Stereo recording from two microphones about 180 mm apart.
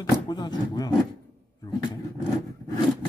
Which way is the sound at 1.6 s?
20° left (ahead or behind).